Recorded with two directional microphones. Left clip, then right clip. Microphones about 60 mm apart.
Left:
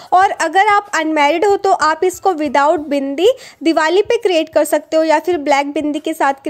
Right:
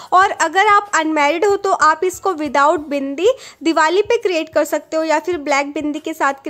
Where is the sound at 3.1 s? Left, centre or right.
Left.